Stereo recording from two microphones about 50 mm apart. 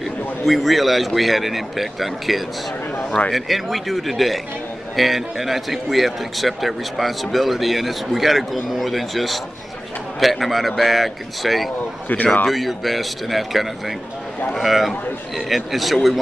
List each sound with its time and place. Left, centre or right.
0.0 s a man's voice: centre
12.1 s speech: left
12.4 s a man's voice: centre